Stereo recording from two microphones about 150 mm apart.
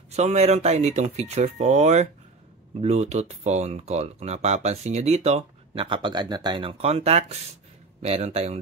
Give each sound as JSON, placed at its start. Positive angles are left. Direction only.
{"t": 0.1, "sound": "speech", "side_deg": -50}